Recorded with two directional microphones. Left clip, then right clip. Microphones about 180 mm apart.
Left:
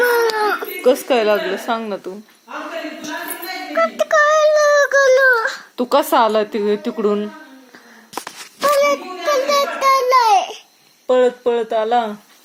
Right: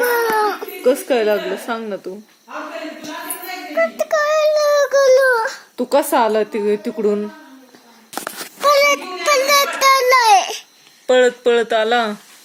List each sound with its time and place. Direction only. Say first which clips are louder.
0.0 s baby cry: left 2 dB; centre (ahead or behind)
0.3 s speech: even; 5° right (ahead or behind)
3.7 s speech: left 1 dB; centre (ahead or behind)
8.7 s a sound: right 2 dB; 5° right (ahead or behind)
11.0 s speech: right 1 dB; 25° right (ahead or behind)